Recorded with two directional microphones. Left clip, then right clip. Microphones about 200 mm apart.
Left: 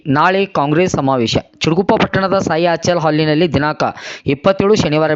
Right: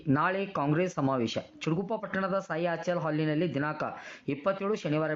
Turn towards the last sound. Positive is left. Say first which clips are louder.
# left 17 dB
turn(degrees=40)  # may be behind; listen again after turning